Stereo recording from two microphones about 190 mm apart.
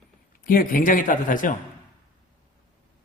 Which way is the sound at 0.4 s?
50° left (ahead or behind).